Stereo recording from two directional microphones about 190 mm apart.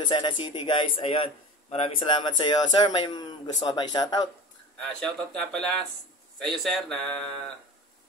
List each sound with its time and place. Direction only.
0.0 s a man's voice: 25° left (ahead or behind)
4.7 s a man's voice: 5° left (ahead or behind)